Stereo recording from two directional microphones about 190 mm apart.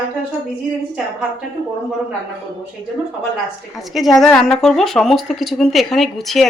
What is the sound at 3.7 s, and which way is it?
Speech, centre (ahead or behind).